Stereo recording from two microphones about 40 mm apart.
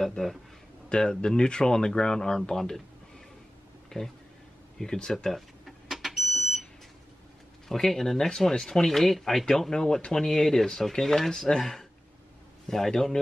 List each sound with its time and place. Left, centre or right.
0.0 s speech: centre
0.8 s speech: centre
3.9 s speech: centre
5.1 s speech: centre
5.9 s vehicle: centre
7.6 s speech: centre